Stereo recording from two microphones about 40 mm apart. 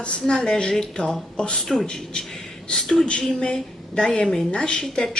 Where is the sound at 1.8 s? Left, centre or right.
Left.